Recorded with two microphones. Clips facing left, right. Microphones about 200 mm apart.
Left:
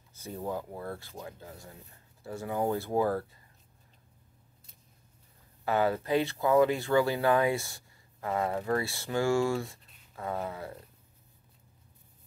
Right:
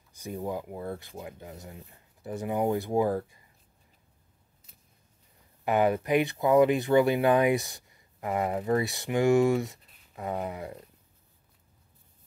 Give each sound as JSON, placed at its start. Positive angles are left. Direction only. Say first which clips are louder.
{"t": 0.1, "sound": "a sound", "louder": "right 4 dB", "side_deg": -15}
{"t": 0.5, "sound": "speech", "louder": "right 1 dB", "side_deg": -15}
{"t": 5.7, "sound": "speech", "louder": "right 3 dB", "side_deg": -20}